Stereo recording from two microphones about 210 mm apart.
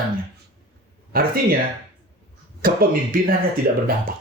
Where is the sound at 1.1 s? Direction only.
45° right (ahead or behind).